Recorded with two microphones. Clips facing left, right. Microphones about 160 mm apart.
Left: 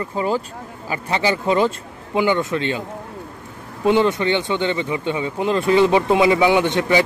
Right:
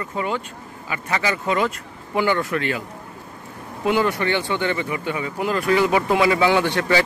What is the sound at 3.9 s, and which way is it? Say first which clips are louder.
A man's voice: left 4 dB; 20° left (ahead or behind).